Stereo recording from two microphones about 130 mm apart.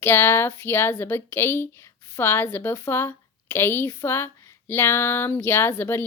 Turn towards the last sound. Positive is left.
turn(degrees=20)  # may be behind; listen again after turning